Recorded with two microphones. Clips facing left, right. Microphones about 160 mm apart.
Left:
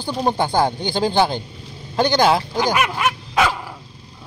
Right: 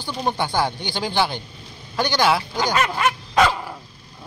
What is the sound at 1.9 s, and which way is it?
Speech, 30° left (ahead or behind).